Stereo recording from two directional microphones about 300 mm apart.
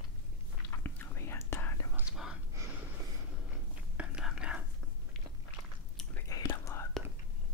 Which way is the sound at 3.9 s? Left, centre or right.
Centre.